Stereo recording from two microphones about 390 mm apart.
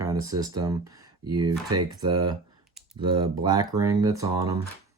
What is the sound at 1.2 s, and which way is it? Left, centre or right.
Speech, right.